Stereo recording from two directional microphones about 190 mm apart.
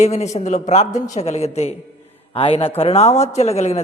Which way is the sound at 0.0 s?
35° left (ahead or behind).